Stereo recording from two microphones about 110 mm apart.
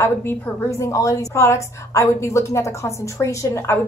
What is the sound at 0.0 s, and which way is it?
A woman's voice, 20° left (ahead or behind).